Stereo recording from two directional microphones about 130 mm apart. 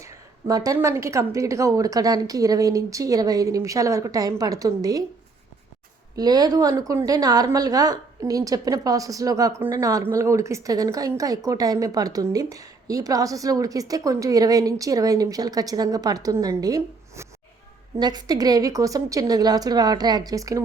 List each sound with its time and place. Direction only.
0.0 s a woman's voice: 25° right (ahead or behind)
6.1 s a woman's voice: 30° right (ahead or behind)